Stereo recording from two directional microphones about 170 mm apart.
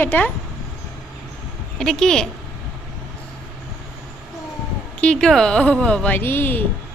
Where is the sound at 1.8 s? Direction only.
5° left (ahead or behind).